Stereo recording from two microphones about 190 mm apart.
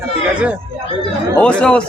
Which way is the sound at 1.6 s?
5° left (ahead or behind).